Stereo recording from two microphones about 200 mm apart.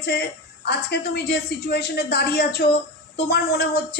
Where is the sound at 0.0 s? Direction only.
55° left (ahead or behind).